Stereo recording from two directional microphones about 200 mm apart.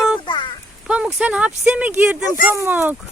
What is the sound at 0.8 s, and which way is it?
Speech, 5° right (ahead or behind).